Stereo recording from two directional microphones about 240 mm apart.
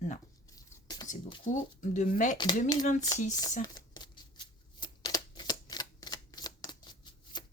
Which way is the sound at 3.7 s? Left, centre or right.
Centre.